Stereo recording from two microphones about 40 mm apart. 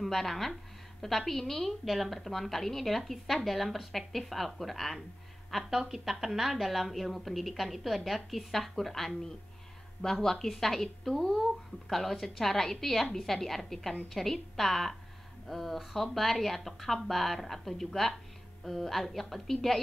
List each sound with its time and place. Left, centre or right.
0.0 s a woman's voice: centre
5.7 s a woman's voice: centre